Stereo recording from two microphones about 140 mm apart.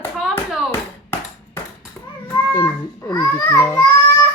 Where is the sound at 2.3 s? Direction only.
20° left (ahead or behind).